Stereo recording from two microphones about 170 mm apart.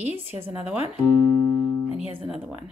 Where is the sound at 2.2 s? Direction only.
10° right (ahead or behind).